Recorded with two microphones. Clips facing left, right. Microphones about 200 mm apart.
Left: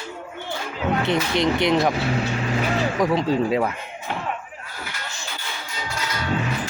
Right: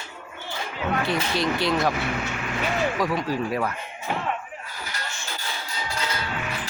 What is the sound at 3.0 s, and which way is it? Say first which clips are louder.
Speech: left 5 dB; 25° left (ahead or behind).